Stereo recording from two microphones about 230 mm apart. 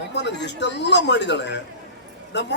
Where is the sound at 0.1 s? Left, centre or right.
Left.